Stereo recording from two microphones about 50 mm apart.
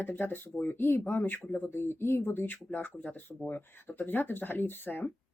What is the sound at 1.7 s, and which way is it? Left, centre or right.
Speech, left.